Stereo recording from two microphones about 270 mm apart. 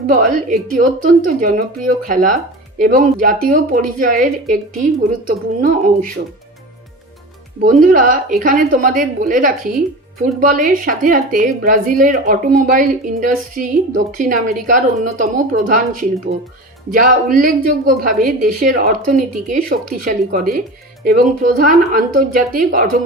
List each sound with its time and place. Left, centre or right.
0.1 s speech: right
7.6 s a woman's voice: right